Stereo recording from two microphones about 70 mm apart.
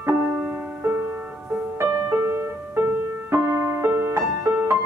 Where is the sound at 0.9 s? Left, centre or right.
Right.